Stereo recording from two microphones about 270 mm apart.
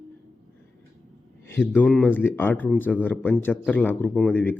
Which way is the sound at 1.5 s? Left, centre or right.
Centre.